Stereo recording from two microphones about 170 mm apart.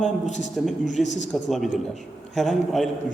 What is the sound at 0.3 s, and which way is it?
A man's voice, 45° left (ahead or behind).